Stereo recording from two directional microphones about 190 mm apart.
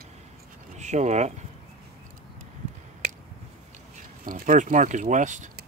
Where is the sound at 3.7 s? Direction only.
45° right (ahead or behind).